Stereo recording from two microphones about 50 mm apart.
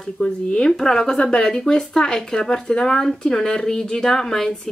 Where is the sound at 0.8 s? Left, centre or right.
Centre.